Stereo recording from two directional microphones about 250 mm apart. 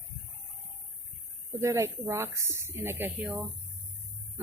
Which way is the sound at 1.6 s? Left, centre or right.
Centre.